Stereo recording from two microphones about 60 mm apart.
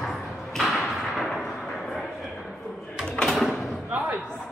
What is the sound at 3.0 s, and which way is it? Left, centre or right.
Drawer open or close, centre.